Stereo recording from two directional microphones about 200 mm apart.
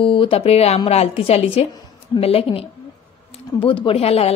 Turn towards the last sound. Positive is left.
turn(degrees=30)  # may be behind; listen again after turning